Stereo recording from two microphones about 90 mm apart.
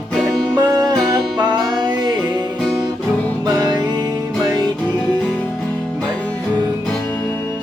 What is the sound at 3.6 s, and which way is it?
Music, 50° right (ahead or behind).